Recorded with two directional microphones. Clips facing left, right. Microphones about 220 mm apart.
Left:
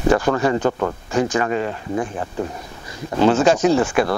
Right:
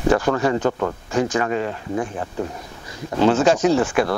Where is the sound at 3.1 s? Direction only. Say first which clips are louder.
Left 1 dB; 20° left (ahead or behind).